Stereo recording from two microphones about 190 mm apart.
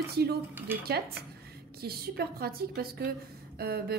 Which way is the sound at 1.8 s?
55° right (ahead or behind).